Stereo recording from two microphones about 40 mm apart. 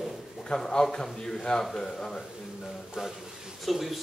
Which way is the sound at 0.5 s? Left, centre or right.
Centre.